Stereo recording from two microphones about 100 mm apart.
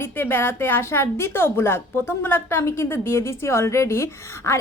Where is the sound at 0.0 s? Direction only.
25° left (ahead or behind).